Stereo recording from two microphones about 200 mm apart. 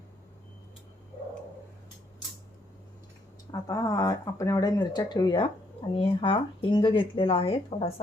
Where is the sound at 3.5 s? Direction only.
15° left (ahead or behind).